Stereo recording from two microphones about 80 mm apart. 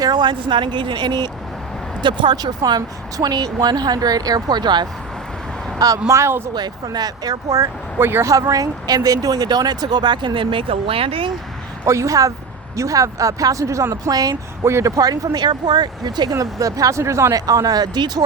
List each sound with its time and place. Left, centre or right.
0.0 s speech: right
2.0 s speech: right
2.3 s speech: right
6.1 s speech: right
6.8 s speech: right
7.9 s speech: right
8.3 s speech: right
11.9 s speech: right
14.6 s speech: right
16.3 s speech: right
17.4 s speech: right